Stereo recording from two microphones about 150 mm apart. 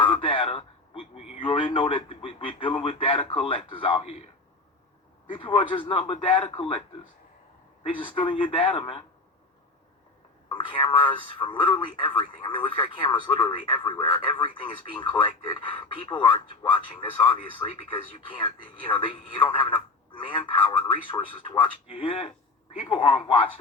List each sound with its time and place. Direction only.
0.1 s a sound: 35° left (ahead or behind)
1.4 s a man's voice: 35° left (ahead or behind)
5.3 s speech: 35° left (ahead or behind)
7.9 s speech: 35° left (ahead or behind)
10.5 s speech: 35° left (ahead or behind)